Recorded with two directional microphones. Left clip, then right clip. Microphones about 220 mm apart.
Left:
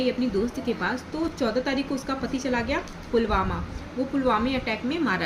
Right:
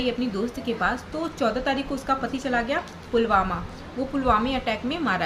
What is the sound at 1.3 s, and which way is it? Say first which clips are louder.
A woman's voice: right 3 dB; 15° right (ahead or behind).